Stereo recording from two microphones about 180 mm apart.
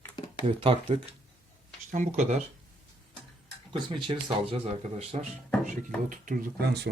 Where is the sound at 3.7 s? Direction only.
25° right (ahead or behind).